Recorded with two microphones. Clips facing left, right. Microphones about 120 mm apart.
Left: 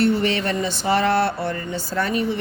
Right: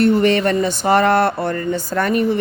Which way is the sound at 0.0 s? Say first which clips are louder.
Right 6 dB; 50° right (ahead or behind).